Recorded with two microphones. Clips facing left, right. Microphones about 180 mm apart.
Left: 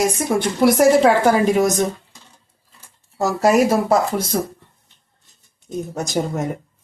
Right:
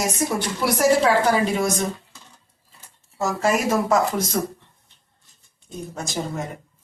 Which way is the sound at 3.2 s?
35° left (ahead or behind).